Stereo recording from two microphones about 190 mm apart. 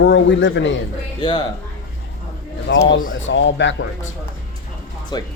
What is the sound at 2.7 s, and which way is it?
Speech, 70° left (ahead or behind).